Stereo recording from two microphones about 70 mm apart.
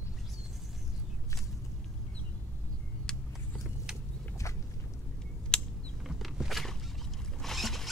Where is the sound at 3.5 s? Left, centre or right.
Centre.